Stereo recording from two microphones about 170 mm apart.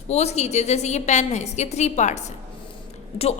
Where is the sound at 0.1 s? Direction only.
40° left (ahead or behind).